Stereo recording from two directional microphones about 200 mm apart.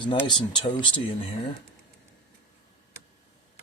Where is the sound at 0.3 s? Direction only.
20° left (ahead or behind).